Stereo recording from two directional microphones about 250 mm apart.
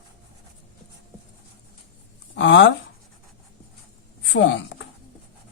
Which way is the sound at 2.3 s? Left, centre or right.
Left.